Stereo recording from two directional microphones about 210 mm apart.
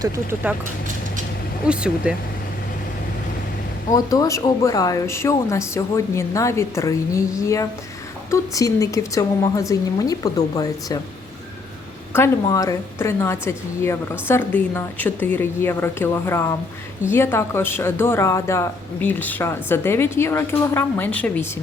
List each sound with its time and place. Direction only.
0.0 s speech: 10° right (ahead or behind)
1.6 s speech: 5° right (ahead or behind)
3.8 s speech: 15° left (ahead or behind)
12.1 s speech: 15° left (ahead or behind)